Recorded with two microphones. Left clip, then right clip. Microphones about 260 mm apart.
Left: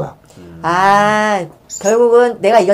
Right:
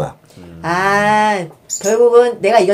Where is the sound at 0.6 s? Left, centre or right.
Left.